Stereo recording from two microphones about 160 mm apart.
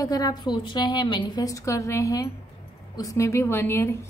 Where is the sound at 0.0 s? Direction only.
25° left (ahead or behind).